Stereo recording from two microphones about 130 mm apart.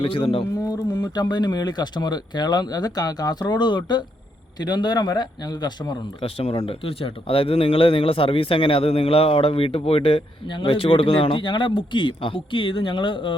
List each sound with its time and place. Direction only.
0.0 s speech: 45° left (ahead or behind)
0.6 s speech: 30° left (ahead or behind)
6.3 s speech: 50° left (ahead or behind)